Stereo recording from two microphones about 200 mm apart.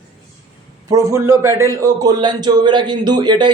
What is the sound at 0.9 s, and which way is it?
A man's voice, 15° right (ahead or behind).